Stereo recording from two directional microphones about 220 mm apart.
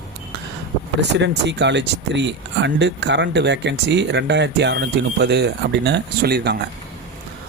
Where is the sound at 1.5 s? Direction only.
50° right (ahead or behind).